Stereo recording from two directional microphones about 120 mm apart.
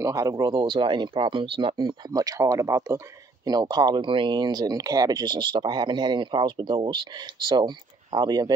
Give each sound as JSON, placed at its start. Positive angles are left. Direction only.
{"t": 0.0, "sound": "speech", "side_deg": -25}